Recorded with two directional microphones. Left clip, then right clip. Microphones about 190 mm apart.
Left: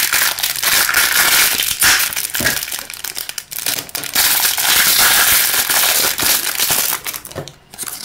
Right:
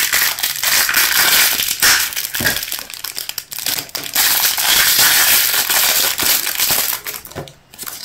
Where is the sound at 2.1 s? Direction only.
5° left (ahead or behind).